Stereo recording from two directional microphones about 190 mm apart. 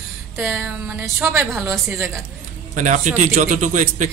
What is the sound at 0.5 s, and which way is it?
Speech, 10° right (ahead or behind).